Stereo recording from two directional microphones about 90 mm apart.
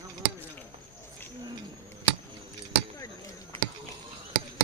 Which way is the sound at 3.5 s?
90° right.